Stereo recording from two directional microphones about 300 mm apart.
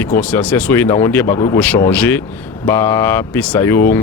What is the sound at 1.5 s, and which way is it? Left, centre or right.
Speech, centre.